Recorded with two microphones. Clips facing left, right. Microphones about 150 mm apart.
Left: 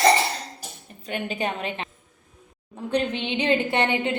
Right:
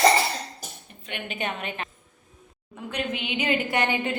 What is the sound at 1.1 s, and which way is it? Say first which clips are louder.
A woman's voice: left 4 dB; 35° left (ahead or behind).